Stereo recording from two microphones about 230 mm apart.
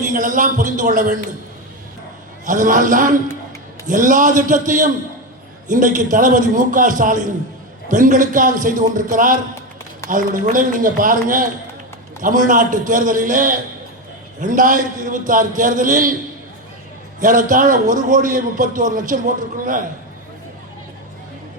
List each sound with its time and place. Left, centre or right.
0.0 s a man's voice: right
2.5 s a man's voice: right
17.2 s a man's voice: right